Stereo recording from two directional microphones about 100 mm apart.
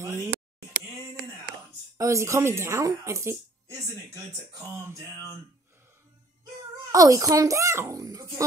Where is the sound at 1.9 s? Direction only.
30° right (ahead or behind).